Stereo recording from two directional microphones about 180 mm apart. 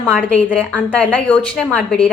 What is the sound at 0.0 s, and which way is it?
A woman's voice, 5° left (ahead or behind).